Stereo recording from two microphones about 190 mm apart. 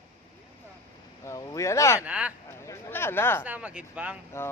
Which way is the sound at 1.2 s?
15° left (ahead or behind).